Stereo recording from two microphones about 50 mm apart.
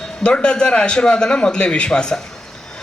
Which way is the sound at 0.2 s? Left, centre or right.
Left.